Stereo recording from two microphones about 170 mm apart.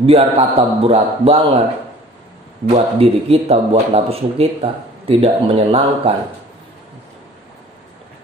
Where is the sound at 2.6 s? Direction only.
35° right (ahead or behind).